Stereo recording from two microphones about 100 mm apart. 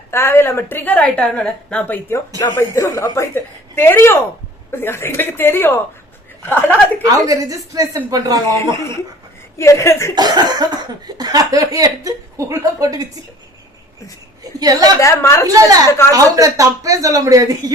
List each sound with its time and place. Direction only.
0.1 s a woman's voice: 25° left (ahead or behind)
2.6 s speech: 25° left (ahead or behind)
7.3 s speech: 35° right (ahead or behind)
8.5 s speech: 30° left (ahead or behind)
10.2 s speech: 45° right (ahead or behind)
14.6 s speech: 40° right (ahead or behind)
14.9 s speech: 30° left (ahead or behind)
15.5 s speech: 40° right (ahead or behind)
15.9 s speech: 25° left (ahead or behind)
16.1 s speech: 35° right (ahead or behind)